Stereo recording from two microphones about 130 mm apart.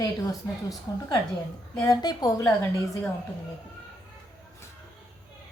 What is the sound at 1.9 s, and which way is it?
Speech, 30° left (ahead or behind).